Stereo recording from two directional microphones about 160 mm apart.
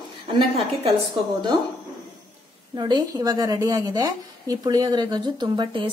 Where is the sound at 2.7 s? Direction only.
25° right (ahead or behind).